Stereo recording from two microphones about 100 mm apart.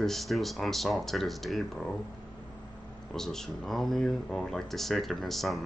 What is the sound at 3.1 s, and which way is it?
Speech, 5° left (ahead or behind).